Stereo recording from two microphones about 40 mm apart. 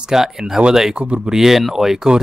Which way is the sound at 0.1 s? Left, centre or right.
Centre.